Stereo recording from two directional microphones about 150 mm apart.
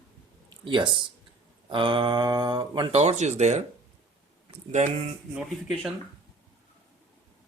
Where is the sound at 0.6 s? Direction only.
35° right (ahead or behind).